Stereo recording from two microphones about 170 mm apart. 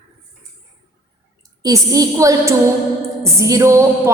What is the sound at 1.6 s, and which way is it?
Speech, 20° right (ahead or behind).